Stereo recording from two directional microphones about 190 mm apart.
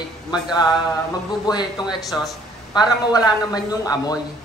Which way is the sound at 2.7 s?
20° left (ahead or behind).